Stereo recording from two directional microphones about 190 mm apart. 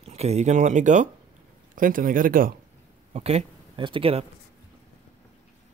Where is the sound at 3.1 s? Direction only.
35° right (ahead or behind).